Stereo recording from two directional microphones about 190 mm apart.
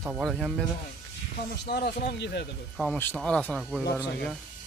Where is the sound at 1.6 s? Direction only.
55° left (ahead or behind).